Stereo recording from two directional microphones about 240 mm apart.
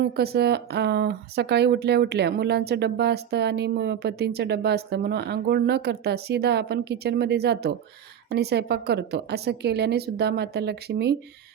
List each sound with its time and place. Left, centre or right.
0.0 s speech: right